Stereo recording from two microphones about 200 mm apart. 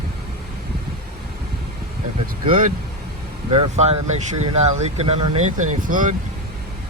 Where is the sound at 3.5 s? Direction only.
35° right (ahead or behind).